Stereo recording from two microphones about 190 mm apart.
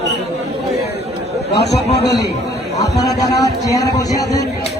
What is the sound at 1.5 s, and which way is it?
Speech, 60° left (ahead or behind).